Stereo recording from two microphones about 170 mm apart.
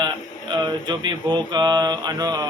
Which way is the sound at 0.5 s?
25° right (ahead or behind).